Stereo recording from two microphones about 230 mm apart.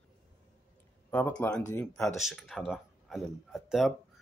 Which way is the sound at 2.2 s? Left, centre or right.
Centre.